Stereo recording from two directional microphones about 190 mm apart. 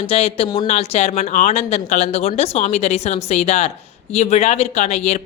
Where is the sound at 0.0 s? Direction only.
30° left (ahead or behind).